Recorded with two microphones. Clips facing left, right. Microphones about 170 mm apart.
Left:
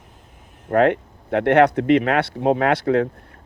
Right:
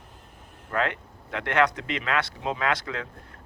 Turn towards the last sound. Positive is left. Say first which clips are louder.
# left 11 dB
turn(degrees=55)  # may be behind; listen again after turning